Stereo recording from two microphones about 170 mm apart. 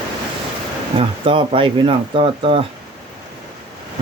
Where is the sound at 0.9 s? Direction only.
30° right (ahead or behind).